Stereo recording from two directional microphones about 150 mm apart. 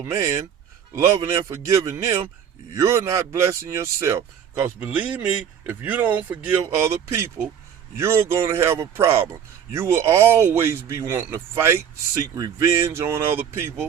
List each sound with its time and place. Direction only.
0.0 s a man's voice: 20° right (ahead or behind)